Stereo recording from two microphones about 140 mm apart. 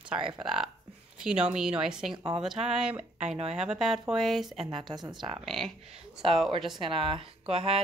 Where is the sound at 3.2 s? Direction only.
50° right (ahead or behind).